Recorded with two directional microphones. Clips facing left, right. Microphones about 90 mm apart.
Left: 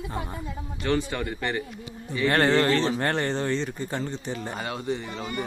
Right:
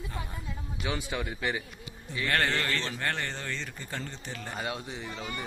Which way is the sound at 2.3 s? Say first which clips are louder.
Left 8 dB; 35° left (ahead or behind).